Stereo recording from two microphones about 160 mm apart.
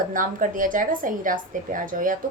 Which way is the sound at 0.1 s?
55° right (ahead or behind).